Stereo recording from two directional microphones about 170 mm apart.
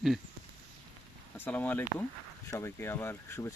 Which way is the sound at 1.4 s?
10° left (ahead or behind).